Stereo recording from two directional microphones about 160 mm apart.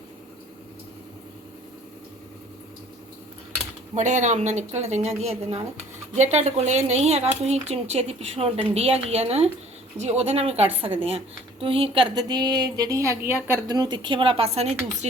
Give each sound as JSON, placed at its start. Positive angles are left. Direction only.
{"t": 3.9, "sound": "a woman's voice", "side_deg": -50}